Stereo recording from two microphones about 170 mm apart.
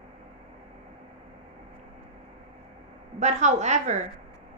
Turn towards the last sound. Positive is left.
turn(degrees=-45)  # may be behind; listen again after turning